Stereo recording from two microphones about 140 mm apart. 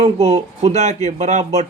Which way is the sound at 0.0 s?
45° right (ahead or behind).